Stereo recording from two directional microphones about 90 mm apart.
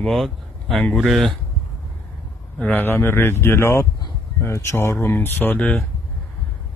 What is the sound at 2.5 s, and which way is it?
Speech, 15° left (ahead or behind).